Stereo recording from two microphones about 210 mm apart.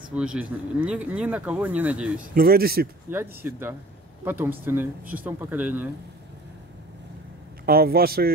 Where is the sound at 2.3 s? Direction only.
45° right (ahead or behind).